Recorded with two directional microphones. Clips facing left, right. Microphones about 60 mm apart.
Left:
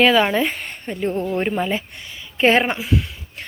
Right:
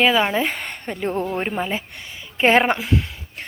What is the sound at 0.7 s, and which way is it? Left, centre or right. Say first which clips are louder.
Speech: left 1 dB; right.